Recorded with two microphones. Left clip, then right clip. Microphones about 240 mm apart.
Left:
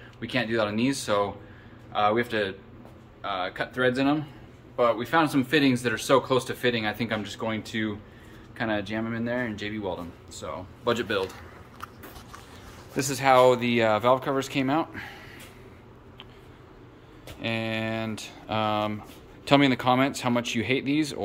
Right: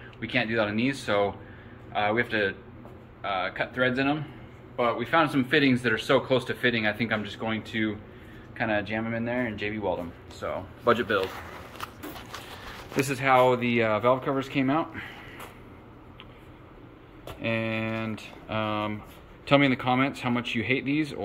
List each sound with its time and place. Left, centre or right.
0.2 s speech: centre
12.9 s speech: centre
17.4 s speech: centre